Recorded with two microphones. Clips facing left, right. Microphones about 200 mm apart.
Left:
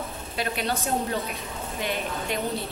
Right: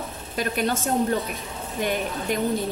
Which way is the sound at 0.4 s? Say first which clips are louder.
Right 4 dB; 45° right (ahead or behind).